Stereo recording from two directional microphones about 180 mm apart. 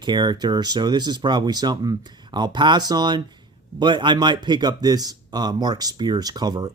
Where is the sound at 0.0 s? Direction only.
25° right (ahead or behind).